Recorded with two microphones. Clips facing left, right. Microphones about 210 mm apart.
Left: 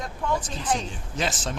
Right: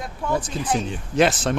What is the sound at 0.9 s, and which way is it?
Speech, 65° right (ahead or behind).